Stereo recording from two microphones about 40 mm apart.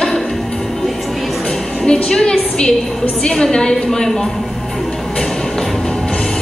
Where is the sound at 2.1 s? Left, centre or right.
Centre.